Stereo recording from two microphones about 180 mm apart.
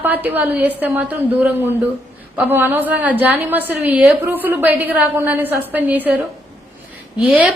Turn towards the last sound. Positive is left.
turn(degrees=-5)  # may be behind; listen again after turning